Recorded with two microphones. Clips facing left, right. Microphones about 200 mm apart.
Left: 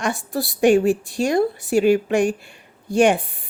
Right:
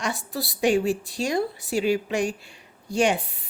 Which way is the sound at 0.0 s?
50° left (ahead or behind).